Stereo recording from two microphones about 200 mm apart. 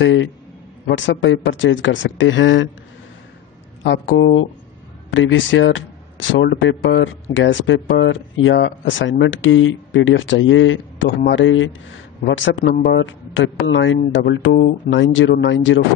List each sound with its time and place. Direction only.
0.0 s a man's voice: 70° left (ahead or behind)
3.8 s speech: 65° left (ahead or behind)